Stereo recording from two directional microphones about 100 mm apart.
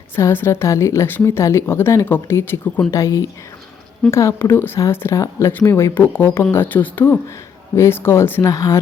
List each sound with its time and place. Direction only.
0.2 s a woman's voice: 25° left (ahead or behind)
2.9 s a woman's voice: 30° left (ahead or behind)